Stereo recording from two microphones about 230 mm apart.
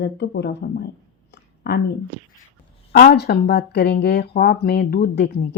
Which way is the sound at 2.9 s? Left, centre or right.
Left.